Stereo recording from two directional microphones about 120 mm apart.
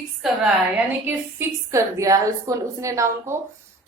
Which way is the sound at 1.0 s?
25° right (ahead or behind).